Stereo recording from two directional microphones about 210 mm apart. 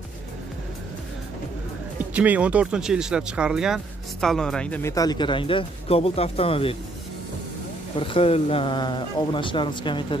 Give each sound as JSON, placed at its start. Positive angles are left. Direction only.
{"t": 2.1, "sound": "speech", "side_deg": -5}
{"t": 7.9, "sound": "a man's voice", "side_deg": 25}